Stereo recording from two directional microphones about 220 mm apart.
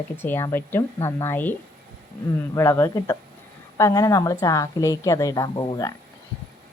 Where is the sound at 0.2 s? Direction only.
10° left (ahead or behind).